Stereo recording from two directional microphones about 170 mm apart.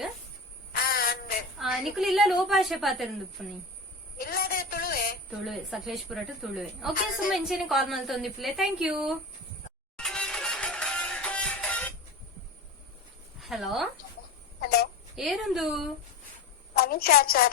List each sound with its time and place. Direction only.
0.7 s a sound: 60° left (ahead or behind)
1.5 s a woman's voice: centre (ahead or behind)
4.2 s a sound: 60° left (ahead or behind)
5.4 s a woman's voice: centre (ahead or behind)
10.0 s music: 5° left (ahead or behind)
13.4 s speech: centre (ahead or behind)
14.6 s a sound: 65° left (ahead or behind)
15.1 s a woman's voice: centre (ahead or behind)
16.7 s a woman's voice: 65° left (ahead or behind)